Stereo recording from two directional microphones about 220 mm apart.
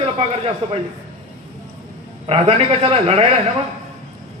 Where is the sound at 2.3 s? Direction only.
25° right (ahead or behind).